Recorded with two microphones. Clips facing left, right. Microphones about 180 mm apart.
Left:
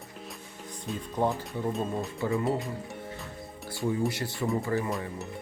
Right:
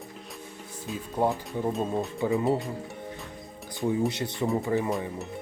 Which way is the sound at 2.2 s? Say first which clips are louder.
Right 3 dB; 20° right (ahead or behind).